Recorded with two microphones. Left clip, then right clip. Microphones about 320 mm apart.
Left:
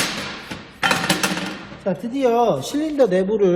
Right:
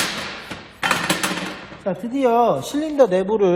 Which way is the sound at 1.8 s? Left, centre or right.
Centre.